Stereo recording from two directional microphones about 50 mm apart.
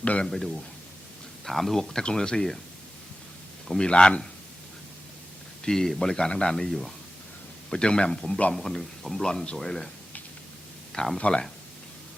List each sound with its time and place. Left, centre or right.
0.0 s a man's voice: left
0.3 s a man's voice: centre
3.8 s a man's voice: centre
5.6 s a man's voice: centre
6.7 s a man's voice: centre
7.7 s speech: centre
8.5 s speech: centre
10.9 s speech: centre
11.2 s a man's voice: left